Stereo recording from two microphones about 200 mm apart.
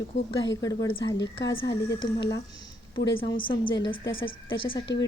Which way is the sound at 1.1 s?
65° left (ahead or behind).